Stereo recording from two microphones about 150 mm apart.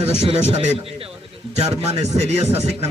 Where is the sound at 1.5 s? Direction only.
45° right (ahead or behind).